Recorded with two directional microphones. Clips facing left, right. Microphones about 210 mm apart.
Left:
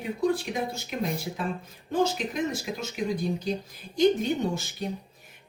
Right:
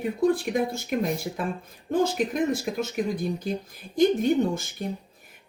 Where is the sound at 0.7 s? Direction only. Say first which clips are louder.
Right 4 dB; 55° right (ahead or behind).